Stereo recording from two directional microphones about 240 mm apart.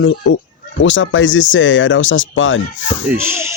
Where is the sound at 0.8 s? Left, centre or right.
Left.